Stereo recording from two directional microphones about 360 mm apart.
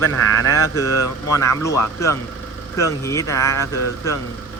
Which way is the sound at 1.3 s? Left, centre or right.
Centre.